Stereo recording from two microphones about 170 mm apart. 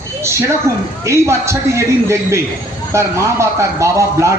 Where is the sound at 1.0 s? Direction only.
15° right (ahead or behind).